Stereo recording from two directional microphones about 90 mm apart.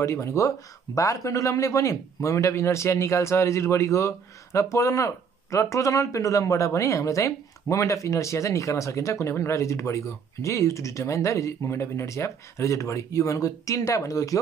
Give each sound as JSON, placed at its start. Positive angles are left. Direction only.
{"t": 0.0, "sound": "speech", "side_deg": 30}